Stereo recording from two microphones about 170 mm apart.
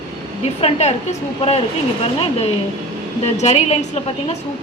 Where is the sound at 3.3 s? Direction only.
40° left (ahead or behind).